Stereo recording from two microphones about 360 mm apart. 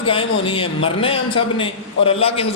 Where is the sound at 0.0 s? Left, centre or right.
Centre.